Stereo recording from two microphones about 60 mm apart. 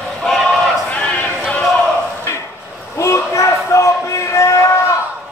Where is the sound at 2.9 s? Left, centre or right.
Left.